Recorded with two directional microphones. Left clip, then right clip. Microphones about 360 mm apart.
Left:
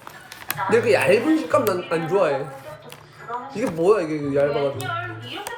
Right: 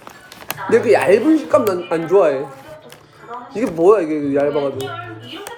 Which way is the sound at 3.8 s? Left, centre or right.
Centre.